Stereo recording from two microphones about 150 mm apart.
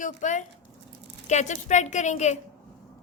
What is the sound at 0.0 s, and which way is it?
A woman's voice, 55° left (ahead or behind).